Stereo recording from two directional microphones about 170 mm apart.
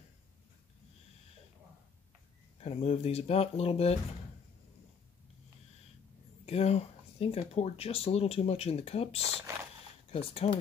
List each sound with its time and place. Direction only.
2.6 s speech: 40° left (ahead or behind)
6.4 s speech: 35° left (ahead or behind)